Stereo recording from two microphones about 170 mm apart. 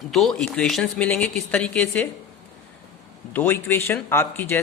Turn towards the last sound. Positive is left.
turn(degrees=10)  # may be behind; listen again after turning